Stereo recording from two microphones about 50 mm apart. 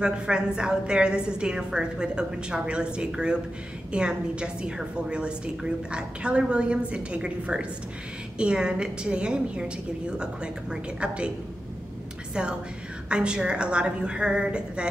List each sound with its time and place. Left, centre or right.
0.0 s a woman's voice: centre
12.4 s a woman's voice: centre